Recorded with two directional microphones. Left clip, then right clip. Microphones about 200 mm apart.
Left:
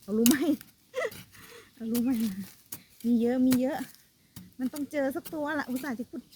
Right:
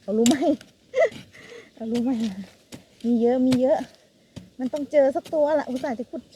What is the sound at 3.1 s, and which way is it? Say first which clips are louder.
Speech: right 6 dB; 30° left (ahead or behind).